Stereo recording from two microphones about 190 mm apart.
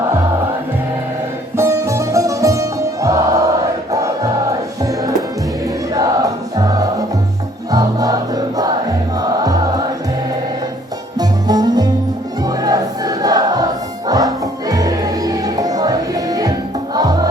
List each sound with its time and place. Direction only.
1.5 s music: 15° right (ahead or behind)
11.2 s music: 20° right (ahead or behind)